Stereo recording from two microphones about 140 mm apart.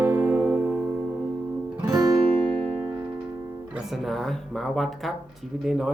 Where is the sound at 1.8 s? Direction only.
25° right (ahead or behind).